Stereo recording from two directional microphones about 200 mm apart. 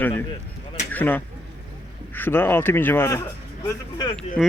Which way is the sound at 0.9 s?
10° left (ahead or behind).